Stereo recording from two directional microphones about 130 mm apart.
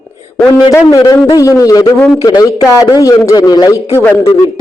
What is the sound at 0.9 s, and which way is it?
A man's voice, 30° left (ahead or behind).